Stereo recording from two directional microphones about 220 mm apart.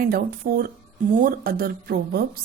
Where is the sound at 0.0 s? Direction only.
45° right (ahead or behind).